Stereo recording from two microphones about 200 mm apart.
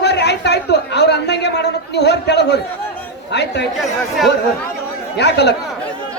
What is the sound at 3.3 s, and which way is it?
Speech, 60° left (ahead or behind).